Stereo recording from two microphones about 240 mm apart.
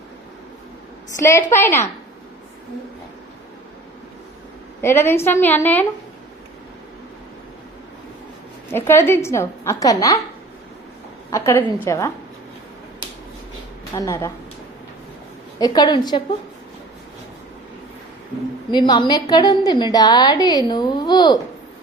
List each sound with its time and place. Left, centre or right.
1.2 s a woman's voice: centre
4.8 s a woman's voice: centre
8.7 s a woman's voice: centre
11.3 s a woman's voice: centre
13.9 s a woman's voice: centre
15.5 s a woman's voice: centre
18.7 s a woman's voice: centre